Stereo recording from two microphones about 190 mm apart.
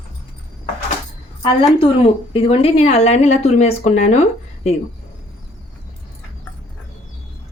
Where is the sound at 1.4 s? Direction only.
30° left (ahead or behind).